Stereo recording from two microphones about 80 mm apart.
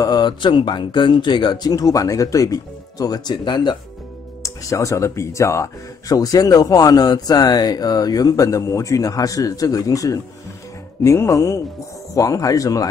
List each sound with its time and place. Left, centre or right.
0.0 s a sound: left
0.4 s speech: left
3.4 s speech: left
4.4 s speech: left
11.1 s speech: left